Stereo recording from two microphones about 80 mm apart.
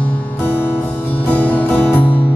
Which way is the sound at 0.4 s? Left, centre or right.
Left.